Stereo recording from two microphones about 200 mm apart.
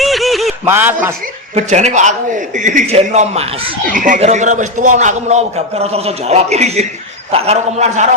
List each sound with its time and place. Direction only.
0.0 s a sound: centre (ahead or behind)
0.6 s a man's voice: 10° right (ahead or behind)
1.5 s a man's voice: 35° right (ahead or behind)